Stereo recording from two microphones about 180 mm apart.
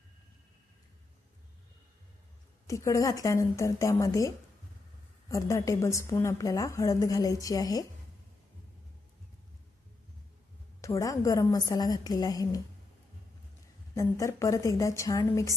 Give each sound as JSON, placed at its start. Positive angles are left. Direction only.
{"t": 2.6, "sound": "a woman's voice", "side_deg": 15}
{"t": 5.3, "sound": "a woman's voice", "side_deg": 15}
{"t": 10.8, "sound": "a woman's voice", "side_deg": 15}
{"t": 13.9, "sound": "a woman's voice", "side_deg": 15}